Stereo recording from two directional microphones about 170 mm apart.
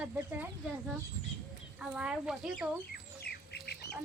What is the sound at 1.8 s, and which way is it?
Speech, 5° right (ahead or behind).